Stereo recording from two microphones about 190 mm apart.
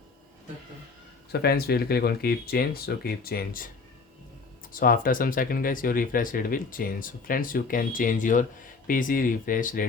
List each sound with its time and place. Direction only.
1.3 s speech: 55° left (ahead or behind)
4.7 s speech: 50° left (ahead or behind)